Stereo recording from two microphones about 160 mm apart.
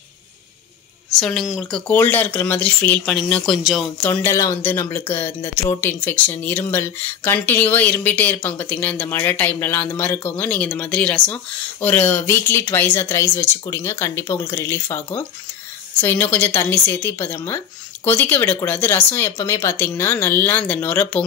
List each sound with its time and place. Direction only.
1.2 s speech: centre (ahead or behind)
4.2 s speech: 15° left (ahead or behind)